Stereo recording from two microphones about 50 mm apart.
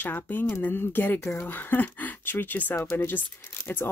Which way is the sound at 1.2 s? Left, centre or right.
Left.